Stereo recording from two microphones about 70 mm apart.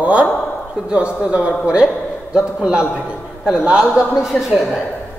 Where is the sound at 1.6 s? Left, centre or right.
Centre.